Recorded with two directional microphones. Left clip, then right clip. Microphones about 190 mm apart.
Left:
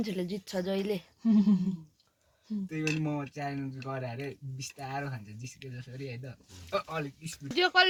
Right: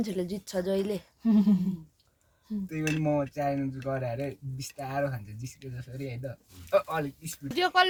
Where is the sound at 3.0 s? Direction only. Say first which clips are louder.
Right 8 dB; 65° right (ahead or behind).